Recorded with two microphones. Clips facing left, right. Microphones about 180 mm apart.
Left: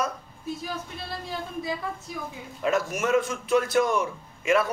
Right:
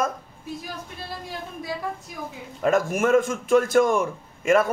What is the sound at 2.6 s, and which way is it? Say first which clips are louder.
A man's voice: right 5 dB; 50° right (ahead or behind).